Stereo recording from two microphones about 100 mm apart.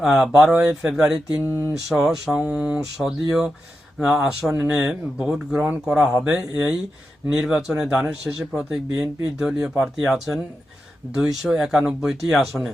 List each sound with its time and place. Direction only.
0.0 s speech: 5° right (ahead or behind)
1.5 s a sound: 20° right (ahead or behind)
1.9 s speech: 5° right (ahead or behind)